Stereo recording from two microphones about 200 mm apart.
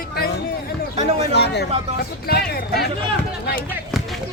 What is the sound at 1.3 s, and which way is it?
Speech, 55° left (ahead or behind).